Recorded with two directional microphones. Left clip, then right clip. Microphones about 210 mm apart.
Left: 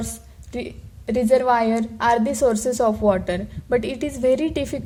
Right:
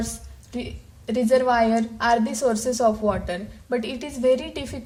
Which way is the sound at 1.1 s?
30° left (ahead or behind).